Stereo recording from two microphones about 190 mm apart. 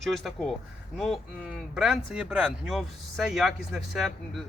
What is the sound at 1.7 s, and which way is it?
Speech, 5° right (ahead or behind).